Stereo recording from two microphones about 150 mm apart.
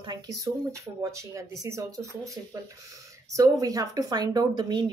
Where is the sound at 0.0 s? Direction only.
25° right (ahead or behind).